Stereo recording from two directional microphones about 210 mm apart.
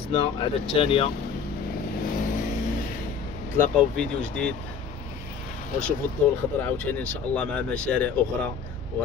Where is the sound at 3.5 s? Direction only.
5° left (ahead or behind).